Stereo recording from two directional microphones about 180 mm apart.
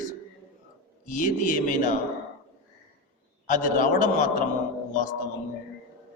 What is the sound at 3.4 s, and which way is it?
A man's voice, 45° left (ahead or behind).